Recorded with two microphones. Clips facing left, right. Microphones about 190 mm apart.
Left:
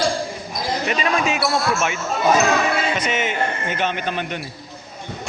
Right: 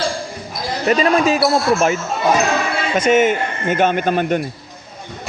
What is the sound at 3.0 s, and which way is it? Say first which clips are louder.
A man's voice: right 8 dB; 50° right (ahead or behind).